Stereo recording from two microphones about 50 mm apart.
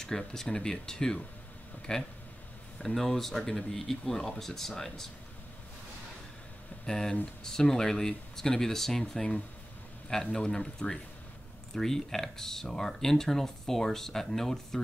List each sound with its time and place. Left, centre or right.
0.3 s speech: centre
2.8 s speech: centre
6.9 s speech: centre